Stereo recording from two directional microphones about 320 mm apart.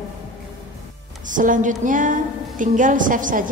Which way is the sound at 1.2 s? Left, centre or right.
Right.